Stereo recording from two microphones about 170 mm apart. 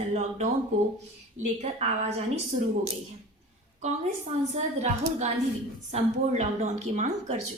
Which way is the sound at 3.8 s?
40° right (ahead or behind).